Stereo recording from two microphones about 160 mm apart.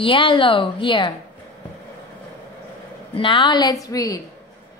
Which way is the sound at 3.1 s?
30° left (ahead or behind).